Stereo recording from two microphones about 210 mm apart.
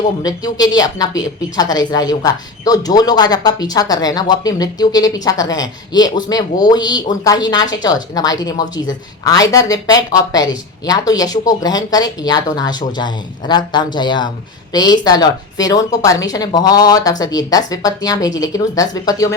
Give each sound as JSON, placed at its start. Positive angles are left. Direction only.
{"t": 0.2, "sound": "a woman's voice", "side_deg": 20}